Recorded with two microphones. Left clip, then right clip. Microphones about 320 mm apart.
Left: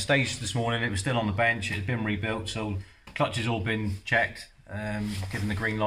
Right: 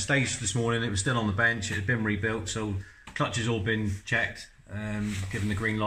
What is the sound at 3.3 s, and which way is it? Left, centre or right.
Speech, left.